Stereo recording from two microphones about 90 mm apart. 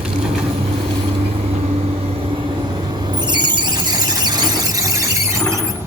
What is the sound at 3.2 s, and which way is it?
Squeal, 55° right (ahead or behind).